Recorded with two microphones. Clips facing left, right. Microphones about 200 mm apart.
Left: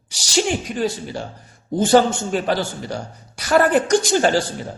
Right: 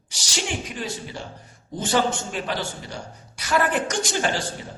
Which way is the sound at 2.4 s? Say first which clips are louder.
Left 7 dB; 40° left (ahead or behind).